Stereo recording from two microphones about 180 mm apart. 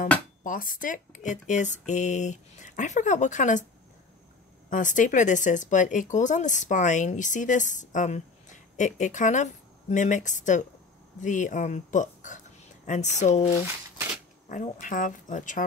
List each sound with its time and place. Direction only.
0.4 s speech: 50° left (ahead or behind)
4.6 s speech: 45° left (ahead or behind)
14.5 s speech: 45° left (ahead or behind)